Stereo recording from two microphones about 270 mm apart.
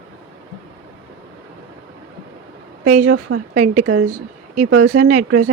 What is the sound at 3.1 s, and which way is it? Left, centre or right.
Speech, right.